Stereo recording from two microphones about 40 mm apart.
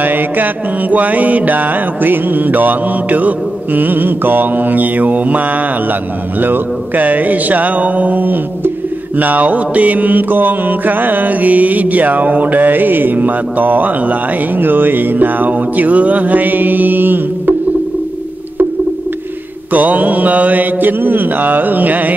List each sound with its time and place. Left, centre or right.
0.0 s mantra: right
19.7 s mantra: right